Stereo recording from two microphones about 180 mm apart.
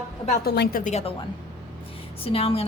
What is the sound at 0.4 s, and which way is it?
Speech, 65° left (ahead or behind).